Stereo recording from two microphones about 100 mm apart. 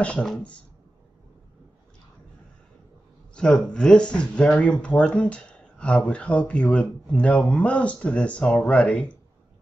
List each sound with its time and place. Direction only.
0.0 s speech: 10° left (ahead or behind)
3.3 s speech: 10° left (ahead or behind)